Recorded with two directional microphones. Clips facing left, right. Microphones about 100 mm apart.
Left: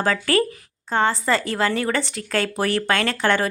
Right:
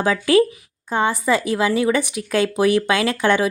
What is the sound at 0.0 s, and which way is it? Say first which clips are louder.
Speech: right 4 dB; 15° right (ahead or behind).